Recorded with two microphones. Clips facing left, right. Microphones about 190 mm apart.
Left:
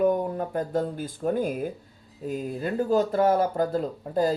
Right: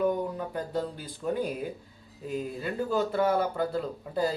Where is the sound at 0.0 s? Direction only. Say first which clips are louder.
Left 4 dB; 50° left (ahead or behind).